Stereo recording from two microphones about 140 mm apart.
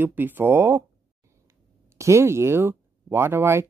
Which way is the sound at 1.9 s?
20° right (ahead or behind).